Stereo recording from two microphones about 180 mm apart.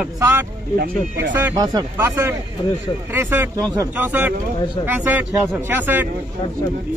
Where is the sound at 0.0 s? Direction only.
10° right (ahead or behind).